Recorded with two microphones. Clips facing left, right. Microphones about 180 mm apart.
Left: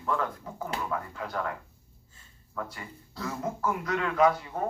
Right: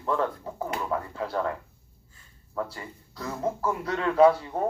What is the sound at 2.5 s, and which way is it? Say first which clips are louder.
Speech: right 5 dB; 30° right (ahead or behind).